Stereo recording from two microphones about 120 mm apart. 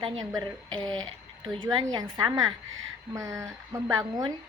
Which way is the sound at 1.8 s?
35° right (ahead or behind).